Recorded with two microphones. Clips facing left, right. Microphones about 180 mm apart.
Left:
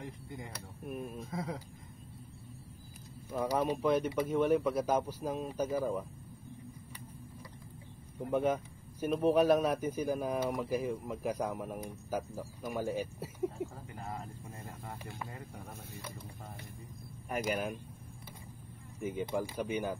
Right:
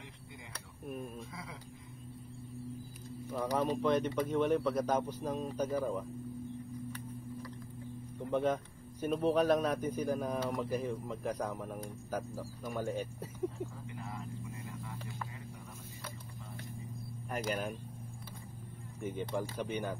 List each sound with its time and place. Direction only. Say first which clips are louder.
0.0 s speech: left 7 dB; 45° left (ahead or behind)
0.5 s a man's voice: right 3 dB; 5° left (ahead or behind)
1.3 s speech: left 9 dB; 40° left (ahead or behind)
3.3 s a man's voice: left 1 dB; 10° left (ahead or behind)
8.3 s a man's voice: left 1 dB; 10° left (ahead or behind)
13.9 s a sound: left 1 dB; 40° left (ahead or behind)
17.3 s a man's voice: left 2 dB; 10° left (ahead or behind)
18.9 s a man's voice: left 2 dB; 5° left (ahead or behind)